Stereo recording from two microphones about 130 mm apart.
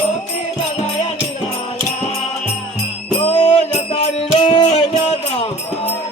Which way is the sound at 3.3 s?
50° left (ahead or behind).